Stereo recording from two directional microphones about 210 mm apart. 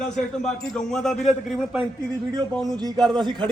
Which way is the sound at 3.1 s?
20° right (ahead or behind).